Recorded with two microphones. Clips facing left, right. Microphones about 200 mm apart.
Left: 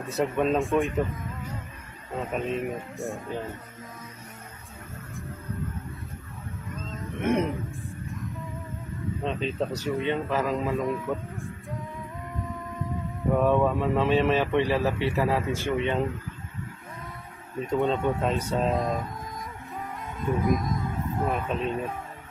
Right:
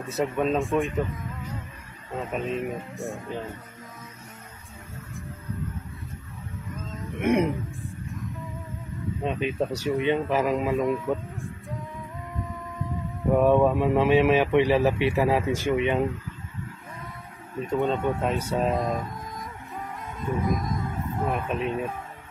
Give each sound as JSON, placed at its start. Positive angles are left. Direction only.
{"t": 0.0, "sound": "speech", "side_deg": 0}
{"t": 2.1, "sound": "speech", "side_deg": 0}
{"t": 6.9, "sound": "a sound", "side_deg": -20}
{"t": 9.2, "sound": "a man's voice", "side_deg": -10}
{"t": 10.8, "sound": "music", "side_deg": 0}
{"t": 13.4, "sound": "a man's voice", "side_deg": -15}
{"t": 17.6, "sound": "speech", "side_deg": 0}
{"t": 20.2, "sound": "speech", "side_deg": 0}